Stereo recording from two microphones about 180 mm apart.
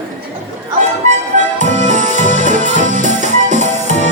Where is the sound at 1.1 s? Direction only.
40° right (ahead or behind).